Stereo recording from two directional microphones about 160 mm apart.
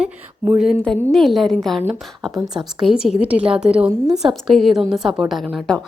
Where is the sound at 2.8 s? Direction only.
5° right (ahead or behind).